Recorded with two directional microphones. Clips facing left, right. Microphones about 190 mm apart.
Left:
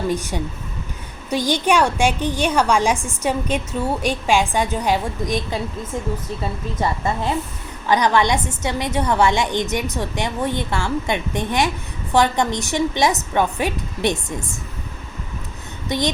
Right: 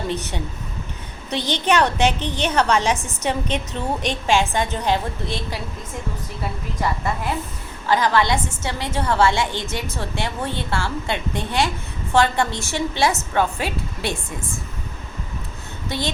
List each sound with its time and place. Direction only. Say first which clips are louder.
0.1 s a woman's voice: left 3 dB; 10° left (ahead or behind)
6.7 s a woman's voice: left 2 dB; 25° left (ahead or behind)
15.9 s a woman's voice: left 4 dB; 15° left (ahead or behind)